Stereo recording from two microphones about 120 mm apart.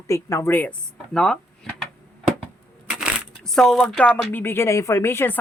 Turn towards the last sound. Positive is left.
turn(degrees=20)  # may be behind; listen again after turning